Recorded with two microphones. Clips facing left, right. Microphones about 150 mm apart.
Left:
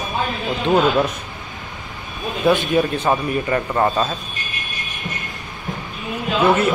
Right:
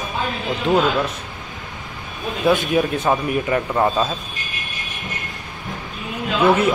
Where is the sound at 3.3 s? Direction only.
5° right (ahead or behind).